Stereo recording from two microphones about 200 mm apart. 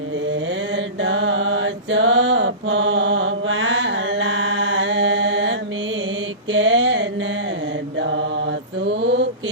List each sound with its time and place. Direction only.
1.0 s mantra: 70° right (ahead or behind)
6.5 s a sound: 70° right (ahead or behind)
7.9 s mantra: 65° right (ahead or behind)